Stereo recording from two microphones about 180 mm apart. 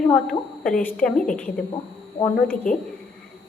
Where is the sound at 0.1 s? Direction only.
5° left (ahead or behind).